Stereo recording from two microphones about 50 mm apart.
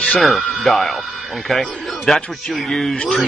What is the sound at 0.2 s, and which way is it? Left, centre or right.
A man's voice, centre.